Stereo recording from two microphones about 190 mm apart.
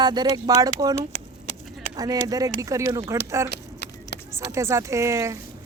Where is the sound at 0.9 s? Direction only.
35° left (ahead or behind).